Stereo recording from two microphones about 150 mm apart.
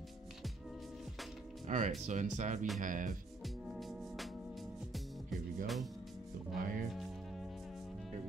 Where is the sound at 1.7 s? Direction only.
55° right (ahead or behind).